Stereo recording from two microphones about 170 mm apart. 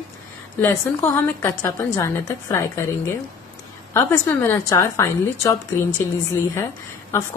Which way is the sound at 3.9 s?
15° left (ahead or behind).